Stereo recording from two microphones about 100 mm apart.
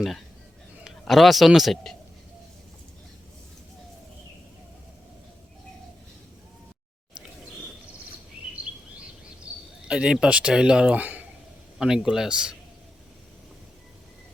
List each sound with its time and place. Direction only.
0.9 s a man's voice: centre (ahead or behind)
9.8 s speech: 10° right (ahead or behind)
11.8 s speech: 5° right (ahead or behind)